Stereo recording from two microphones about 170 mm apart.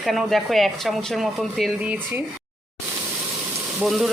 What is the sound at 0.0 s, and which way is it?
Speech, centre (ahead or behind).